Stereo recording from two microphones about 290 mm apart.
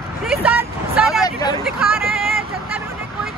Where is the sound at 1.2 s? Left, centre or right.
Centre.